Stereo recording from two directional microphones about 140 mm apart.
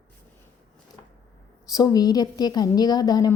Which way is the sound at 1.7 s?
25° left (ahead or behind).